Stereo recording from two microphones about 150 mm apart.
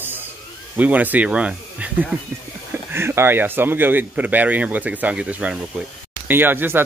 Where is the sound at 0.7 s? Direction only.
10° right (ahead or behind).